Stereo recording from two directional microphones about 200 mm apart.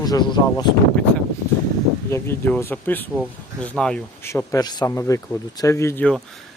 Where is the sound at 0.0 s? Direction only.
20° left (ahead or behind).